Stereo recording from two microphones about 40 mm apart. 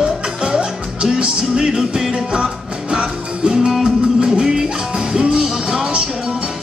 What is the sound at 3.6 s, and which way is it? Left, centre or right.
Music, centre.